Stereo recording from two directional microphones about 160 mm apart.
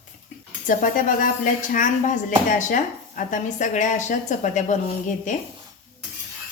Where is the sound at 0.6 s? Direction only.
55° left (ahead or behind).